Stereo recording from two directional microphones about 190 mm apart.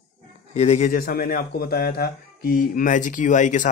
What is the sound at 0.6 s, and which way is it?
Speech, 35° left (ahead or behind).